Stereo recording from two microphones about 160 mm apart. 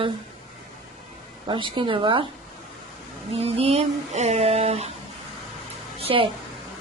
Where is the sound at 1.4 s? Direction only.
30° right (ahead or behind).